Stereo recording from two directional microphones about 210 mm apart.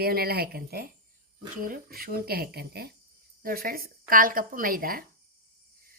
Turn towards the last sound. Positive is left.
turn(degrees=-45)  # may be behind; listen again after turning